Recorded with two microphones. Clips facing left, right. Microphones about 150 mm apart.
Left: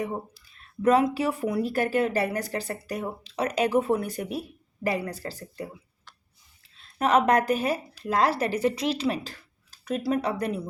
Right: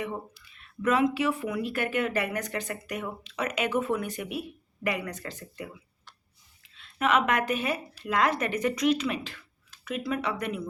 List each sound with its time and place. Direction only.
0.0 s speech: 35° left (ahead or behind)
6.7 s a woman's voice: 35° left (ahead or behind)